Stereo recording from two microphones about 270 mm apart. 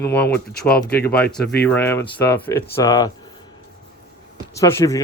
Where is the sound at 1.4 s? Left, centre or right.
Left.